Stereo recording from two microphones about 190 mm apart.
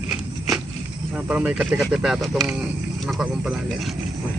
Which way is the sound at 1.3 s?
5° right (ahead or behind).